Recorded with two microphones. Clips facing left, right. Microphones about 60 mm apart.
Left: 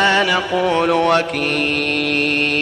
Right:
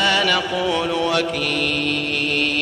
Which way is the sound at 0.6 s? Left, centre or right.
Left.